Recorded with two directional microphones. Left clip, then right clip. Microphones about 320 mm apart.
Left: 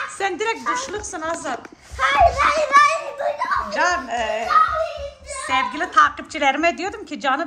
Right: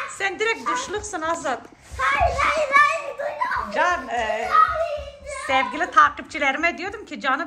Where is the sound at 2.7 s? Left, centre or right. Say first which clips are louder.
Left 3 dB; left.